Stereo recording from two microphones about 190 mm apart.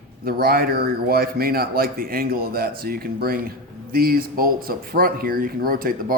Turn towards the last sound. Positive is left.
turn(degrees=-50)  # may be behind; listen again after turning